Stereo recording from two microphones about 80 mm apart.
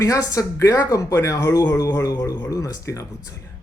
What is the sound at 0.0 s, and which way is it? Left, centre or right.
Speech, left.